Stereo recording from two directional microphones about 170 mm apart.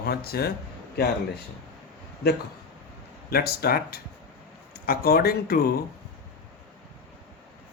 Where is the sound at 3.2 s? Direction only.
65° left (ahead or behind).